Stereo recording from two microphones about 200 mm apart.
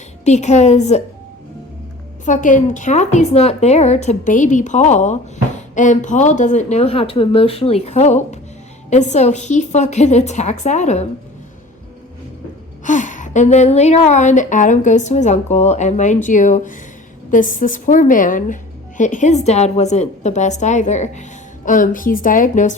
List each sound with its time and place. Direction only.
0.3 s a woman's voice: 35° left (ahead or behind)
2.2 s a woman's voice: 40° left (ahead or behind)
12.8 s a woman's voice: 40° left (ahead or behind)